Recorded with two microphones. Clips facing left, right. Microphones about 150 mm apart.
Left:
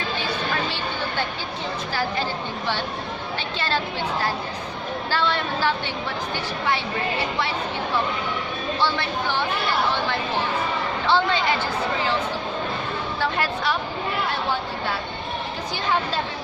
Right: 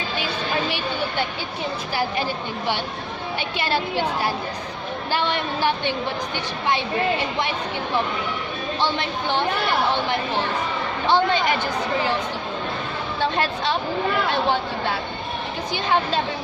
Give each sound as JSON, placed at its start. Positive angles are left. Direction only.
{"t": 5.1, "sound": "a woman's voice", "side_deg": -15}
{"t": 8.8, "sound": "speech", "side_deg": -20}
{"t": 11.0, "sound": "a woman's voice", "side_deg": -15}
{"t": 13.1, "sound": "a woman's voice", "side_deg": -25}